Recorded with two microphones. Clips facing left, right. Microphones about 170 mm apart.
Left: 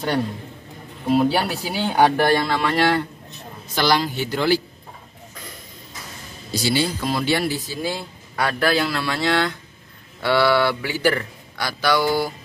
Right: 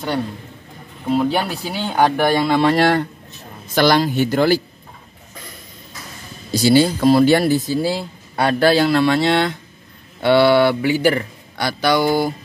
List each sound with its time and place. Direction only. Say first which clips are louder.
1.0 s speech: even; 5° left (ahead or behind)
2.6 s speech: right 5 dB; 45° right (ahead or behind)
6.5 s speech: right 8 dB; 40° right (ahead or behind)
7.9 s speech: right 5 dB; 30° right (ahead or behind)